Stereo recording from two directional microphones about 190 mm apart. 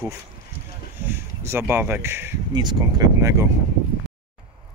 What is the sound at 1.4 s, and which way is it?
Speech, 10° right (ahead or behind).